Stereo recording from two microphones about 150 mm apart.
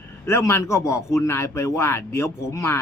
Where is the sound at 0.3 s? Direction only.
15° left (ahead or behind).